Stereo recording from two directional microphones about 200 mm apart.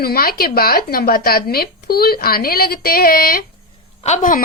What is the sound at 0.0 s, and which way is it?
A woman's voice, 50° left (ahead or behind).